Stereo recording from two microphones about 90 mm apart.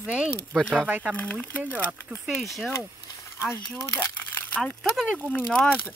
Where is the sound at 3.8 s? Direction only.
25° left (ahead or behind).